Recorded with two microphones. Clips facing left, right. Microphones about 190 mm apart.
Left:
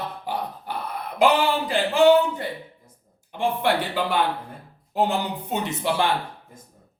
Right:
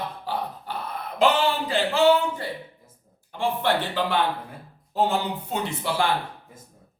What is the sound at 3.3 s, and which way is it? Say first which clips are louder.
A man's voice: left 1 dB; 10° left (ahead or behind).